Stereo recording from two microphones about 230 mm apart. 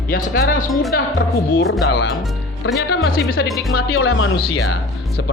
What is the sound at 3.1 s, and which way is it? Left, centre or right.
Speech, left.